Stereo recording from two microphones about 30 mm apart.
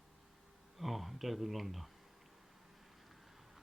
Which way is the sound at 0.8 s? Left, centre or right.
Centre.